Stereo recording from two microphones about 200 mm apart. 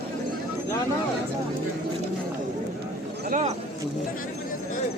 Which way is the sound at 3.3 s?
40° right (ahead or behind).